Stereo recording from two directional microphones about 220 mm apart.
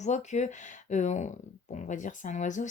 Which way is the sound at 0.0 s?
30° left (ahead or behind).